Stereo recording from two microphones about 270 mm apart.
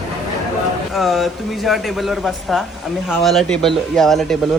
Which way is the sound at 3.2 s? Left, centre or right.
Centre.